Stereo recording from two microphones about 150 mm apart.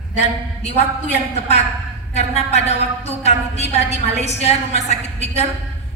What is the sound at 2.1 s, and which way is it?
A man's voice, 45° left (ahead or behind).